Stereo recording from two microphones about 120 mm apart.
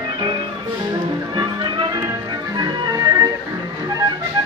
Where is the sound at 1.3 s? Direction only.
40° right (ahead or behind).